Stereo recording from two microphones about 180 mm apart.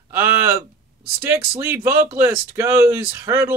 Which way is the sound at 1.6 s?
15° right (ahead or behind).